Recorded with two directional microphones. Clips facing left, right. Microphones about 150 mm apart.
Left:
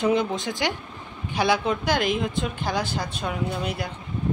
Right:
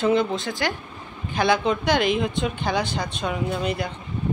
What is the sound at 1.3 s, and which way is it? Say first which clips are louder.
Speech: right 2 dB; 5° left (ahead or behind).